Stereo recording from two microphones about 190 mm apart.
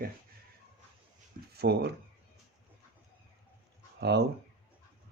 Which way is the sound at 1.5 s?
60° right (ahead or behind).